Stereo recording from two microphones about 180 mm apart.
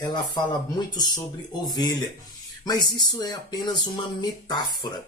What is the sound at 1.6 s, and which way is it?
Speech, 25° left (ahead or behind).